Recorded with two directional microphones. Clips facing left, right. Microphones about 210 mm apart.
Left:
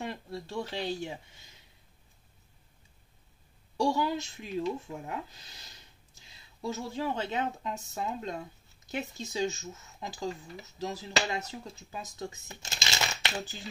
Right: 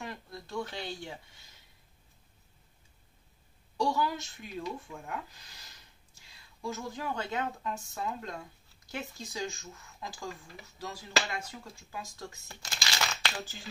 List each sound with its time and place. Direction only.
0.0 s speech: 30° left (ahead or behind)
3.8 s speech: 25° left (ahead or behind)
6.6 s speech: 25° left (ahead or behind)